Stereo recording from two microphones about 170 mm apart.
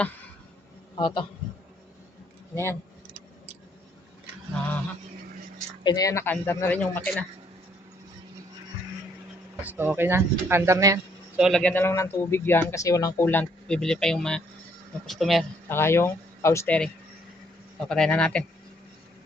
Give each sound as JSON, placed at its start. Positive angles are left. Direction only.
{"t": 0.9, "sound": "a man's voice", "side_deg": 30}
{"t": 5.8, "sound": "speech", "side_deg": 20}
{"t": 9.6, "sound": "speech", "side_deg": -10}
{"t": 11.3, "sound": "speech", "side_deg": -5}
{"t": 11.6, "sound": "speech", "side_deg": 10}
{"t": 13.2, "sound": "speech", "side_deg": 10}
{"t": 15.7, "sound": "speech", "side_deg": 15}